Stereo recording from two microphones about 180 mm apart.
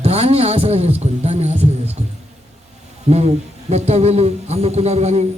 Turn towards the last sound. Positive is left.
turn(degrees=-40)  # may be behind; listen again after turning